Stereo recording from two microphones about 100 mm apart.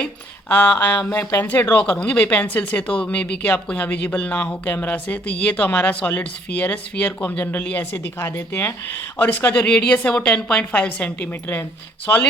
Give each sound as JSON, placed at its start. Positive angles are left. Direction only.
{"t": 0.0, "sound": "speech", "side_deg": 15}
{"t": 1.2, "sound": "speech", "side_deg": 30}
{"t": 1.5, "sound": "speech", "side_deg": 15}